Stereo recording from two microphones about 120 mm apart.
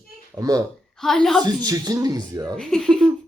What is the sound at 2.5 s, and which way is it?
Speech, 5° left (ahead or behind).